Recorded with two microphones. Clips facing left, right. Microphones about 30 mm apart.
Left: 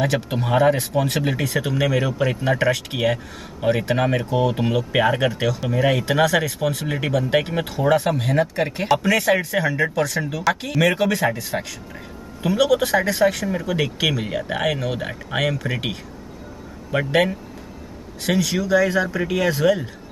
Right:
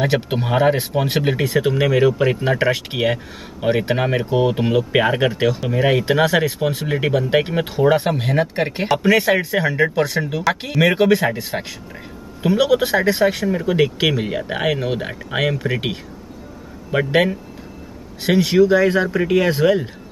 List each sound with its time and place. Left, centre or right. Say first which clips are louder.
0.0 s speech: right 3 dB; right
18.2 s speech: right 7 dB; right